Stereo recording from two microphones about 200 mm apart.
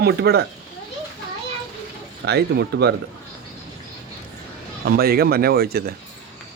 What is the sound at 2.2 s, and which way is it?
Speech, 55° right (ahead or behind).